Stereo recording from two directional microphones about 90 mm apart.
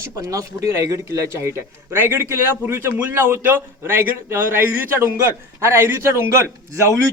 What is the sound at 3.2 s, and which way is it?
A man's voice, 30° right (ahead or behind).